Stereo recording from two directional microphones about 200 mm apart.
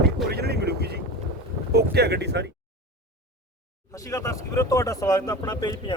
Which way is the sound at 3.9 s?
15° left (ahead or behind).